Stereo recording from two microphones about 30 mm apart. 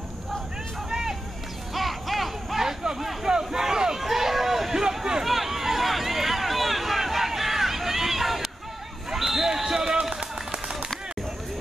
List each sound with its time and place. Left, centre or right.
0.8 s a sound: centre
1.7 s a sound: centre
3.3 s crowd: centre
4.0 s chatter: centre
5.2 s run: centre
9.1 s basketball bounce: centre